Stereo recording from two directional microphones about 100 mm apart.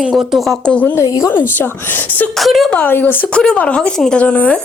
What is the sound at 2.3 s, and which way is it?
Speech, centre (ahead or behind).